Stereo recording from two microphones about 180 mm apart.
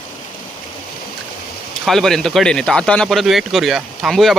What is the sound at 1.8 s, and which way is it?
Speech, centre (ahead or behind).